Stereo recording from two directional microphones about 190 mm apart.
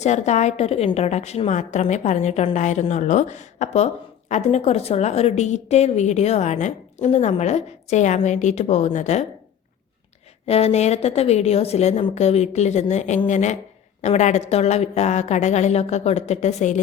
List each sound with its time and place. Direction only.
0.0 s a woman's voice: 35° left (ahead or behind)
10.4 s a woman's voice: 35° left (ahead or behind)